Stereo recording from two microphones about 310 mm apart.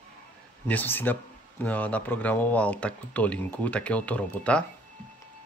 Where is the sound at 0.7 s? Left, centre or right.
Centre.